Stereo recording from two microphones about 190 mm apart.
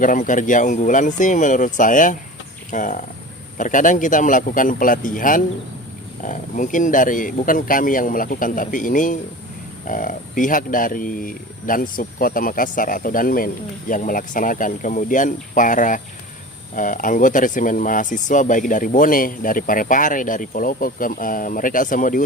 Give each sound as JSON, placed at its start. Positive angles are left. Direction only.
{"t": 0.0, "sound": "speech", "side_deg": 45}